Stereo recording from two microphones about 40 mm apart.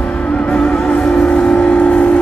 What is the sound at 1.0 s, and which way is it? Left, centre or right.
Vehicle, centre.